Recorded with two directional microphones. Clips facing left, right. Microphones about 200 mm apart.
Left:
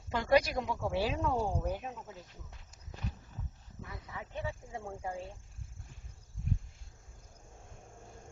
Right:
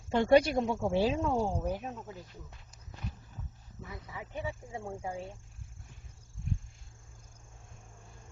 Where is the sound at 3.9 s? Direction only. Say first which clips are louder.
Right 2 dB; 10° right (ahead or behind).